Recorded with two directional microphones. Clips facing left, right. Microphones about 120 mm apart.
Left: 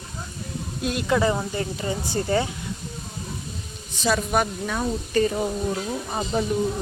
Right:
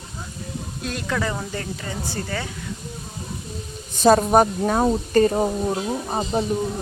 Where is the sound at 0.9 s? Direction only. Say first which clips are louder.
Left 4 dB; 15° left (ahead or behind).